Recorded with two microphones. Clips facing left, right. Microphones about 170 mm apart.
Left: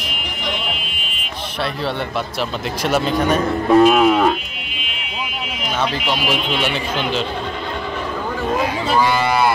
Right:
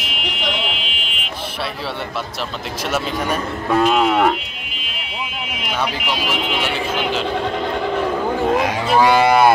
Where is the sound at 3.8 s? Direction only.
5° left (ahead or behind).